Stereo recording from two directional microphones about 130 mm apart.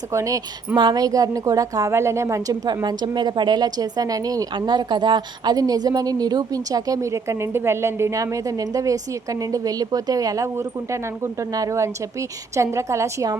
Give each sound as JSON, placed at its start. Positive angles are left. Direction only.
{"t": 0.1, "sound": "a woman's voice", "side_deg": -25}